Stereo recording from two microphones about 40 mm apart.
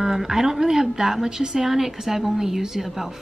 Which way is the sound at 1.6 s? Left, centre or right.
Centre.